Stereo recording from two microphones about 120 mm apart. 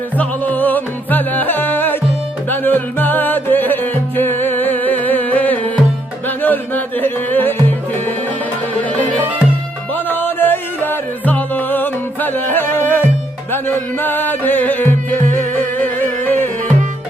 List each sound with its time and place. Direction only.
0.2 s music: 15° left (ahead or behind)
8.8 s music: 15° left (ahead or behind)